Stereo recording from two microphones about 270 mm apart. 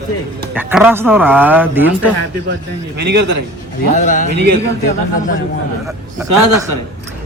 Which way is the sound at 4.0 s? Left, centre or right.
Left.